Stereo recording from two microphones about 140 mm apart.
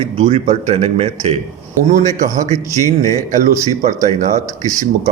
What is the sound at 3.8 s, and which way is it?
Speech, 65° right (ahead or behind).